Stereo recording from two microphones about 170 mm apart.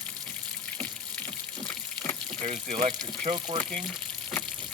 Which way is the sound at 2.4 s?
45° right (ahead or behind).